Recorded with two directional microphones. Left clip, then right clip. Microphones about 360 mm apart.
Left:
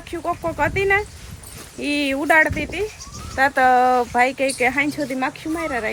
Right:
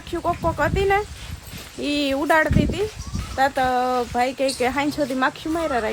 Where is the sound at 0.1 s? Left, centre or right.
Centre.